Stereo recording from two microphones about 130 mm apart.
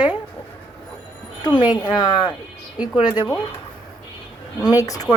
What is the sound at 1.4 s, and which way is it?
A woman's voice, 35° left (ahead or behind).